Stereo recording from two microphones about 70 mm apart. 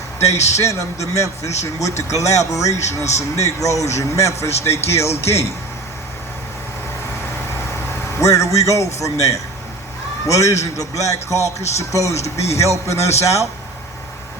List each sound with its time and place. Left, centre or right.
0.5 s a man's voice: left
8.2 s a man's voice: left